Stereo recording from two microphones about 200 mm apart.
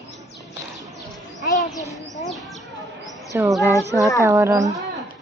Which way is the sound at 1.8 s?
15° left (ahead or behind).